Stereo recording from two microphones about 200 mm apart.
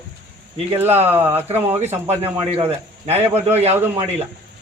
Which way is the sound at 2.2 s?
30° right (ahead or behind).